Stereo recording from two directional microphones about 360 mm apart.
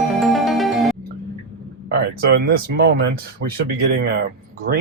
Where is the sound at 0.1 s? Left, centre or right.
Centre.